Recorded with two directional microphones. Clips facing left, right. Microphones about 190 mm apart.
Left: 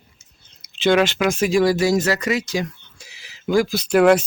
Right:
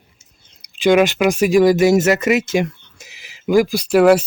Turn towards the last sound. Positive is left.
turn(degrees=-5)  # may be behind; listen again after turning